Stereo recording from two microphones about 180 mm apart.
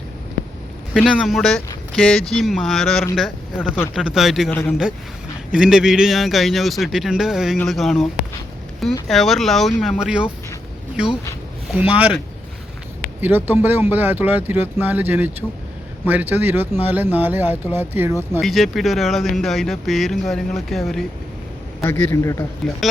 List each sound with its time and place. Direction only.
0.9 s a man's voice: centre (ahead or behind)
13.2 s speech: 10° right (ahead or behind)
18.3 s a man's voice: centre (ahead or behind)
21.8 s a man's voice: 15° left (ahead or behind)